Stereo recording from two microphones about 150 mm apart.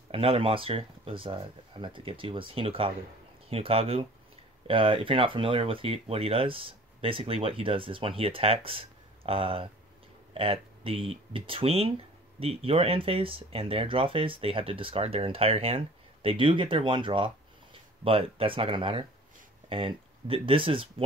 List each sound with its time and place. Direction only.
0.1 s speech: 40° right (ahead or behind)